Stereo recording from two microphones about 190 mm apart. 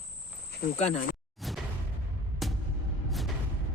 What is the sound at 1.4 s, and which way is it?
Music, centre (ahead or behind).